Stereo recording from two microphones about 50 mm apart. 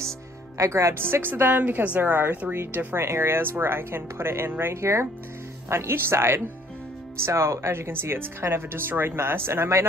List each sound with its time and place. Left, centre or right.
0.6 s speech: right
1.1 s speech: right
1.6 s a woman's voice: right
2.5 s speech: right
4.7 s speech: right
5.7 s speech: right
7.2 s speech: right